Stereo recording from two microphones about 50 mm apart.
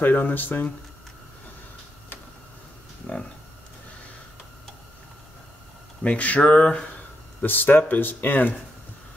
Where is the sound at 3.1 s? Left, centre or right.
Left.